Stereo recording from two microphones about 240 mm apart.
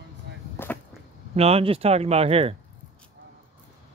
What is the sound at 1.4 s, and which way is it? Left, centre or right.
Speech, right.